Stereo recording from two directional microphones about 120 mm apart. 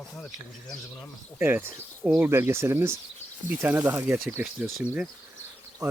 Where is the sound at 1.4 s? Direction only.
15° right (ahead or behind).